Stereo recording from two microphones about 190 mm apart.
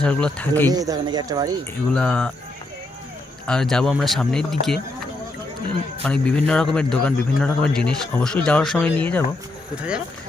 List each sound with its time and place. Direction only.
0.0 s speech: 5° left (ahead or behind)
0.7 s speech: 20° right (ahead or behind)
1.9 s a man's voice: 5° left (ahead or behind)
3.4 s a man's voice: 5° left (ahead or behind)
6.0 s a man's voice: 5° left (ahead or behind)